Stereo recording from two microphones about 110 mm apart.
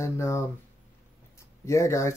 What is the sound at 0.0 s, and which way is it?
Speech, 25° left (ahead or behind).